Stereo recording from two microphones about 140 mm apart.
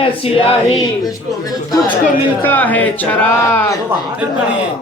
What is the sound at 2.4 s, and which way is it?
Speech, 10° left (ahead or behind).